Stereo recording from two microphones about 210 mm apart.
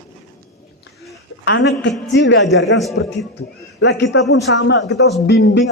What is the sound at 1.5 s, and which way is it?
A man's voice, 60° left (ahead or behind).